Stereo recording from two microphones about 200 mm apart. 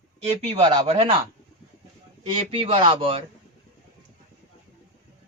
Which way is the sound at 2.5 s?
30° right (ahead or behind).